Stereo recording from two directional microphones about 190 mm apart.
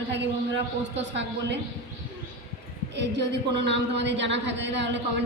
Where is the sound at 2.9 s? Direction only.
65° right (ahead or behind).